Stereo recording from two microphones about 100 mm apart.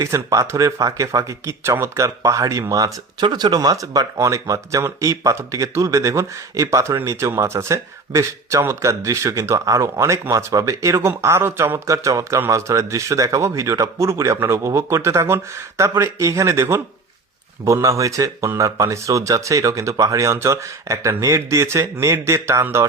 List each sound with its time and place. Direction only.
0.0 s speech: 35° right (ahead or behind)